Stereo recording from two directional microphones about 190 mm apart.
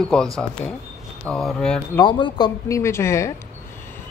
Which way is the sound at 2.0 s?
25° left (ahead or behind).